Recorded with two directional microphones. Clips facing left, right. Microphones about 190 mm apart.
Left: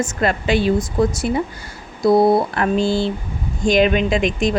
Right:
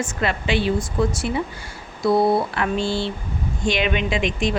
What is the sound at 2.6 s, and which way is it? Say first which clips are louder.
Speech: left 5 dB; 40° left (ahead or behind).